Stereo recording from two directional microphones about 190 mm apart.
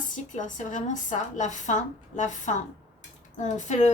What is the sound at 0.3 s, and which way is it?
A woman's voice, 40° left (ahead or behind).